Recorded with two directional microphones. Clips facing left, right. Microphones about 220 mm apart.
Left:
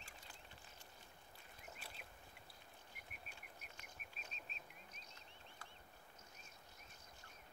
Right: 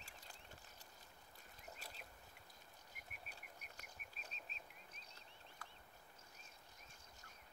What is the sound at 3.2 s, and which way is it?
Bird, 40° right (ahead or behind).